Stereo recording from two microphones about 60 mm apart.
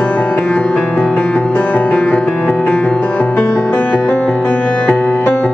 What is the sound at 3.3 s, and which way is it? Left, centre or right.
Music, left.